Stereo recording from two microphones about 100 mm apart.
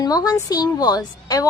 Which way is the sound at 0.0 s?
40° left (ahead or behind).